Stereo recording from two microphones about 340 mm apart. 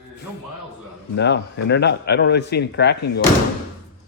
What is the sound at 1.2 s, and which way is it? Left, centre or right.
A man's voice, left.